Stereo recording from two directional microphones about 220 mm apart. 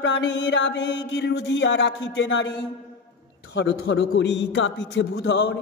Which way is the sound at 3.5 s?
50° left (ahead or behind).